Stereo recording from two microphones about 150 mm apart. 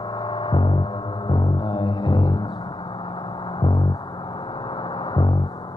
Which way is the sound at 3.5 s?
30° left (ahead or behind).